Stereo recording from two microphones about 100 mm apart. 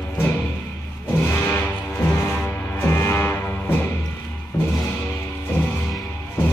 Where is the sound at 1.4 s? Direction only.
20° left (ahead or behind).